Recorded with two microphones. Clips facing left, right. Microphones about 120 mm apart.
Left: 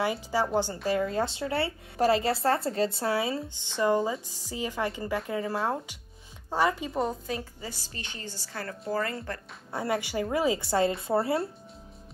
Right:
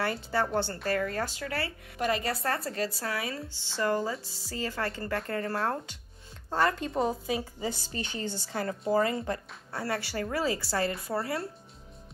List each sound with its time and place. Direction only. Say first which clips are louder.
0.0 s speech: left 2 dB; 10° left (ahead or behind)
7.2 s speech: right 3 dB; 10° right (ahead or behind)
7.9 s a woman's voice: right 6 dB; 30° right (ahead or behind)
9.7 s speech: left 3 dB; 20° left (ahead or behind)